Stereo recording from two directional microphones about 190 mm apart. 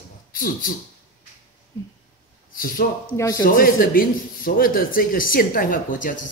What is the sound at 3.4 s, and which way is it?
Speech, 50° left (ahead or behind).